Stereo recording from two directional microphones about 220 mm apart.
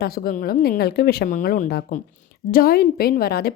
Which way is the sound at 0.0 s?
45° left (ahead or behind).